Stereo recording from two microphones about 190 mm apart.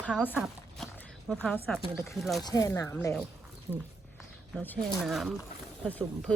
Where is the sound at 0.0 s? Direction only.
5° right (ahead or behind).